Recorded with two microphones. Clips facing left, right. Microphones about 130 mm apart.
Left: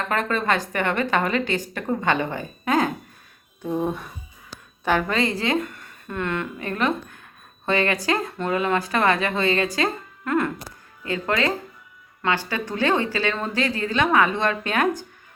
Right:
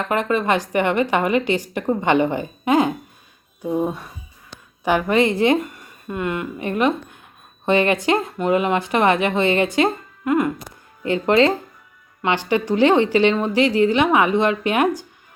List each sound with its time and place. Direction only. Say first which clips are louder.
0.1 s a woman's voice: right 4 dB; 15° right (ahead or behind)
11.0 s a woman's voice: right 8 dB; 25° right (ahead or behind)